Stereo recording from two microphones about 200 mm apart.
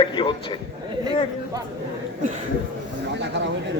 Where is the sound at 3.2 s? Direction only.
65° right (ahead or behind).